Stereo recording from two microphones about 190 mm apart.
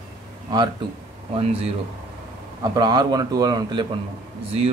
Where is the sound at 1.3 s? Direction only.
30° right (ahead or behind).